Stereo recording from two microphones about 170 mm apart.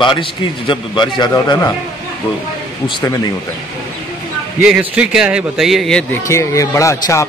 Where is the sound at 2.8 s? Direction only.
20° left (ahead or behind).